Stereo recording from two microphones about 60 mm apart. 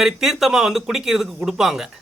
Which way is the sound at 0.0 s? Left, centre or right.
Centre.